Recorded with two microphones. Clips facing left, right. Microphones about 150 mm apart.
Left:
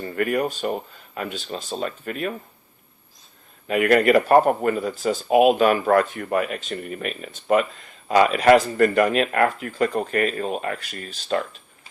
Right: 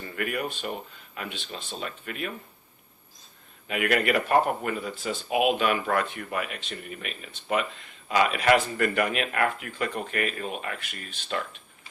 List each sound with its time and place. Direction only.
0.0 s speech: 40° left (ahead or behind)
3.7 s speech: 40° left (ahead or behind)